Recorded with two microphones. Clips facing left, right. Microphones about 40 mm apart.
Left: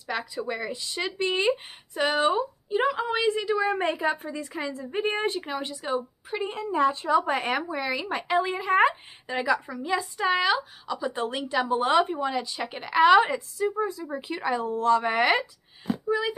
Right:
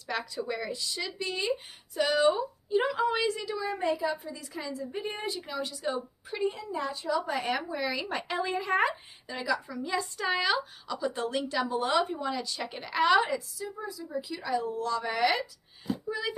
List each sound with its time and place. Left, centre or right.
0.0 s a woman's voice: centre
0.8 s a woman's voice: left
2.8 s a woman's voice: centre; by 5.6 s left
5.6 s speech: left
6.5 s a woman's voice: left
7.4 s speech: left; by 8.7 s centre
8.7 s speech: left
11.1 s speech: left
13.2 s a woman's voice: left
16.1 s speech: centre